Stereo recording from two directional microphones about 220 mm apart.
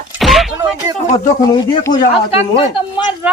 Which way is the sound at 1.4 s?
15° left (ahead or behind).